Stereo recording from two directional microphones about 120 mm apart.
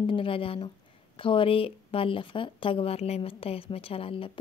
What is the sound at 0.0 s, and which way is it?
Speech, 45° left (ahead or behind).